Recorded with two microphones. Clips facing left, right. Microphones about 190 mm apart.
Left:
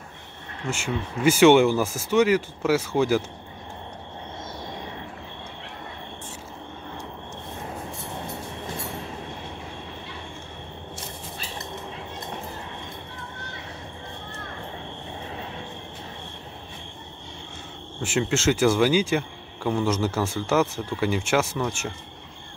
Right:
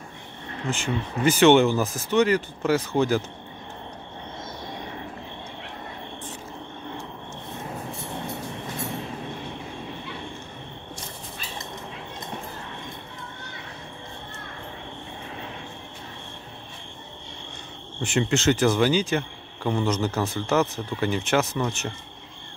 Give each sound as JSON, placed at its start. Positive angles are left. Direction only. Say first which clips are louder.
{"t": 0.7, "sound": "speech", "louder": "right 1 dB", "side_deg": 10}
{"t": 18.0, "sound": "speech", "louder": "right 1 dB", "side_deg": 5}